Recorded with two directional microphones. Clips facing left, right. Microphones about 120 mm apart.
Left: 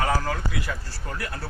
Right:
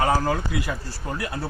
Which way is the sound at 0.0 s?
20° right (ahead or behind).